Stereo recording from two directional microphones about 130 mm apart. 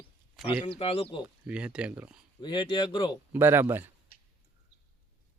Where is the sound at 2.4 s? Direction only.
35° left (ahead or behind).